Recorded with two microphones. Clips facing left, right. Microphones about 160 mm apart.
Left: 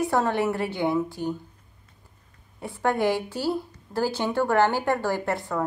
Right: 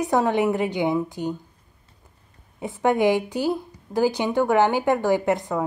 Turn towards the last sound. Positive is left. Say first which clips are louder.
# right 6 dB
turn(degrees=-20)  # may be behind; listen again after turning